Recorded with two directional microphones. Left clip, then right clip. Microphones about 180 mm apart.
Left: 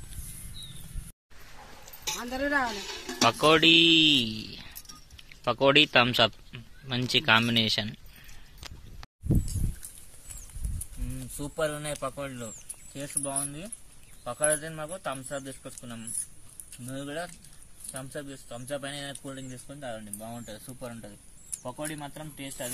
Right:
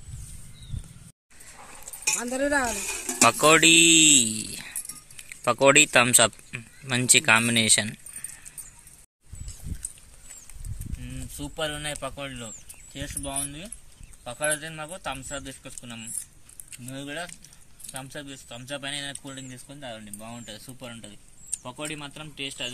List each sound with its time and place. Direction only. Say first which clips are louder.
2.0 s speech: right 5 dB; 35° right (ahead or behind)
3.1 s speech: right 3 dB; 10° right (ahead or behind)
11.5 s speech: even; 5° right (ahead or behind)